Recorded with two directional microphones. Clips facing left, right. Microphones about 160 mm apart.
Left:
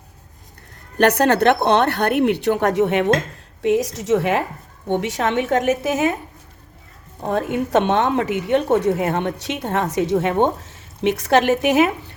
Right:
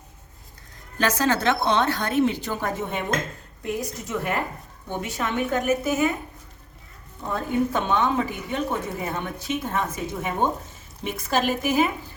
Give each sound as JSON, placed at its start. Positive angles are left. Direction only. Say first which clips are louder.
{"t": 0.9, "sound": "a woman's voice", "louder": "left 7 dB", "side_deg": 60}
{"t": 3.6, "sound": "a woman's voice", "louder": "left 11 dB", "side_deg": 90}
{"t": 7.2, "sound": "speech", "louder": "left 3 dB", "side_deg": 75}